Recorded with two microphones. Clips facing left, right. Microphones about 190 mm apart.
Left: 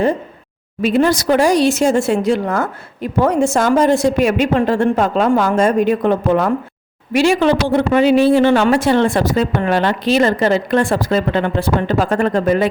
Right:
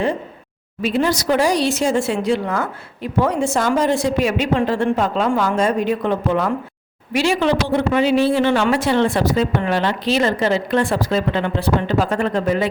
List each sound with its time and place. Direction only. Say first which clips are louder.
0.8 s speech: left 5 dB; 50° left (ahead or behind)